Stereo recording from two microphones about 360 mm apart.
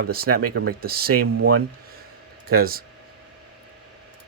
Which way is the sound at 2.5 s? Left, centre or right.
Right.